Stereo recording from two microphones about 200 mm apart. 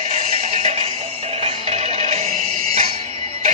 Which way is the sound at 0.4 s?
35° right (ahead or behind).